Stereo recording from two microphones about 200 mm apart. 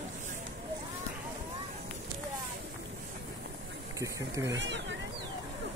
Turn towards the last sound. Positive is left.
turn(degrees=-65)  # may be behind; listen again after turning